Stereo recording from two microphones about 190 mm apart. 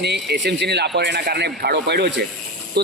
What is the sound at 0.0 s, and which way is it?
A man's voice, 60° right (ahead or behind).